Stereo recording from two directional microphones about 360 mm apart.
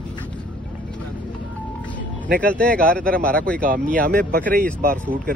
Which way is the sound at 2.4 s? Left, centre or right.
Centre.